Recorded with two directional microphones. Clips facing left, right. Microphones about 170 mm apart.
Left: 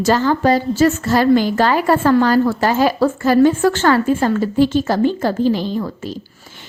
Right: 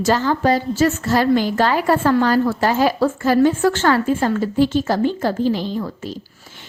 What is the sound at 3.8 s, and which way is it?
A woman's voice, 60° left (ahead or behind).